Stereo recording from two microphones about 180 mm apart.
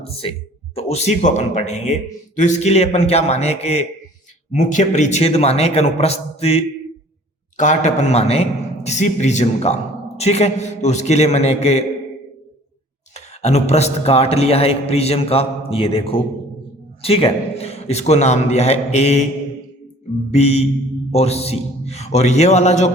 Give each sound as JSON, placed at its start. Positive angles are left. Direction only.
{"t": 0.0, "sound": "a man's voice", "side_deg": 30}
{"t": 13.1, "sound": "a man's voice", "side_deg": 40}
{"t": 20.3, "sound": "a man's voice", "side_deg": 35}